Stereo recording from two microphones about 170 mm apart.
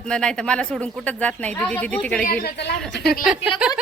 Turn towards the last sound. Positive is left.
turn(degrees=-5)  # may be behind; listen again after turning